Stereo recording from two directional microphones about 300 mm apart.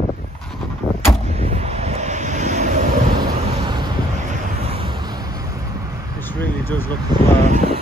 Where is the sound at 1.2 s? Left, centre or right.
Right.